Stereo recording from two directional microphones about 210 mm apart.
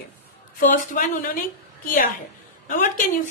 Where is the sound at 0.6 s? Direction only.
40° left (ahead or behind).